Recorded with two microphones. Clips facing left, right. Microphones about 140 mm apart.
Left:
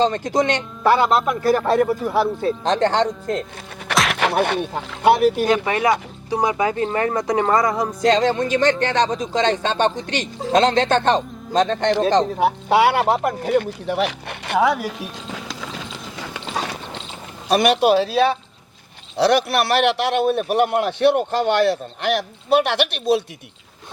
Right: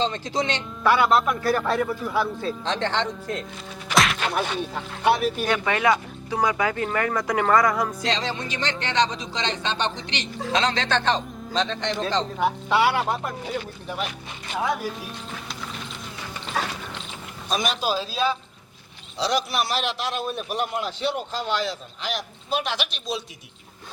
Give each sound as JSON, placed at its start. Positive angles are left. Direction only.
{"t": 0.0, "sound": "speech", "side_deg": 45}
{"t": 0.8, "sound": "a man's voice", "side_deg": 30}
{"t": 4.1, "sound": "a man's voice", "side_deg": 70}
{"t": 5.5, "sound": "speech", "side_deg": 30}
{"t": 8.0, "sound": "a man's voice", "side_deg": 50}
{"t": 13.4, "sound": "a man's voice", "side_deg": 55}
{"t": 13.7, "sound": "speech", "side_deg": 75}
{"t": 15.3, "sound": "clip-clop", "side_deg": 90}
{"t": 17.5, "sound": "a man's voice", "side_deg": 65}